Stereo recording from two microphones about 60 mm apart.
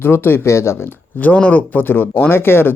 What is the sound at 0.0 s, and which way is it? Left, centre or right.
Speech, left.